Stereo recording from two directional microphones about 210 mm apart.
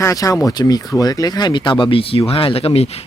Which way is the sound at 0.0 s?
15° left (ahead or behind).